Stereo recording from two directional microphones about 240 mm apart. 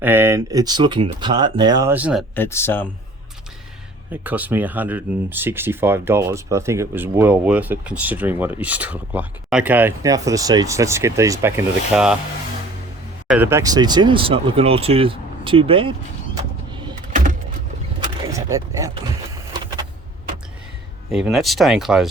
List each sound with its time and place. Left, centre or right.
0.0 s speech: centre
2.3 s speech: centre
4.1 s speech: centre
13.2 s speech: centre; by 15.9 s right
17.1 s power windows: right
18.0 s a sound: centre
21.1 s speech: centre